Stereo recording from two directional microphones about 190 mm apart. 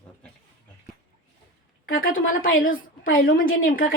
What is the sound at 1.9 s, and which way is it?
A woman's voice, 50° left (ahead or behind).